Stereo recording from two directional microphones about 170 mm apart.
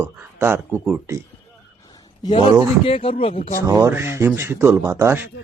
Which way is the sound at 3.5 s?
20° right (ahead or behind).